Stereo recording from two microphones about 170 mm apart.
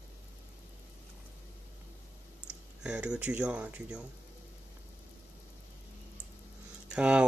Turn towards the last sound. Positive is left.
turn(degrees=-5)  # may be behind; listen again after turning